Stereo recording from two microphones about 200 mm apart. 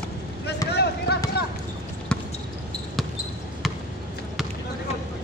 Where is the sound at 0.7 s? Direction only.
55° left (ahead or behind).